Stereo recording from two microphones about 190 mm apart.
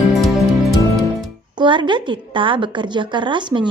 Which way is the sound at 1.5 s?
25° right (ahead or behind).